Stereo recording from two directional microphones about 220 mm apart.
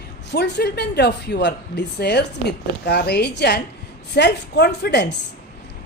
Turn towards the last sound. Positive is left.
turn(degrees=50)  # may be behind; listen again after turning